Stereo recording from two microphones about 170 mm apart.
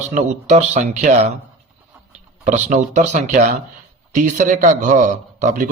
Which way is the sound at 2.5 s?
45° right (ahead or behind).